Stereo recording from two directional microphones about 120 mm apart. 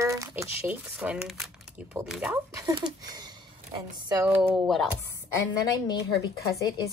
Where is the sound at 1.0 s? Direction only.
10° right (ahead or behind).